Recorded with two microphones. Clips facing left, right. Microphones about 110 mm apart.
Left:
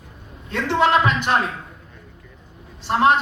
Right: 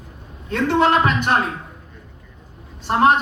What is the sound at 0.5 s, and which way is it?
Speech, 45° right (ahead or behind).